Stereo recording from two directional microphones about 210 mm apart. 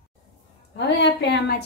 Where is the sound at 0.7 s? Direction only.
55° left (ahead or behind).